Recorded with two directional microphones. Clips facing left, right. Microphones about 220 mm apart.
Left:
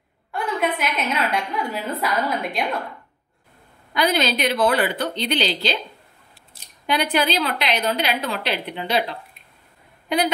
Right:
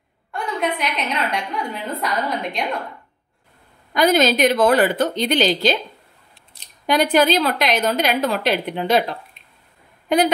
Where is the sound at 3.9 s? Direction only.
45° right (ahead or behind).